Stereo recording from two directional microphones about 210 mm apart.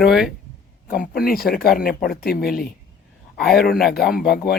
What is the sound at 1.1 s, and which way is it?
Speech, 45° left (ahead or behind).